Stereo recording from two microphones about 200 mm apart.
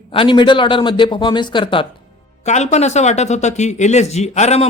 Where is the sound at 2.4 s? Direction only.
35° left (ahead or behind).